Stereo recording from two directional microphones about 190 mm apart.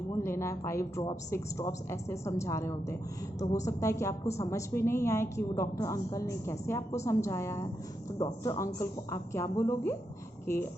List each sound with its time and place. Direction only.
0.2 s a woman's voice: 15° left (ahead or behind)